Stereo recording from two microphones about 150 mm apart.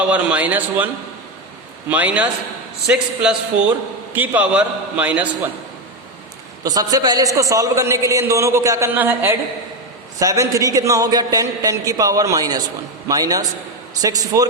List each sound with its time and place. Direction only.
0.1 s a man's voice: 10° right (ahead or behind)
1.9 s a man's voice: 10° right (ahead or behind)
6.6 s a man's voice: 25° right (ahead or behind)